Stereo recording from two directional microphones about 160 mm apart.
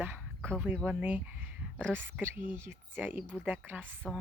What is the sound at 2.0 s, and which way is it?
Speech, 15° right (ahead or behind).